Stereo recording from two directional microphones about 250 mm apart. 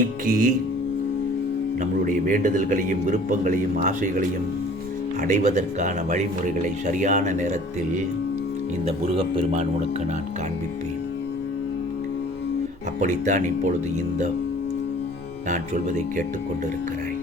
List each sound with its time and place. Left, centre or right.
0.0 s a man's voice: right
1.8 s a man's voice: right
5.3 s speech: right
9.1 s speech: right
13.0 s speech: right
15.4 s speech: right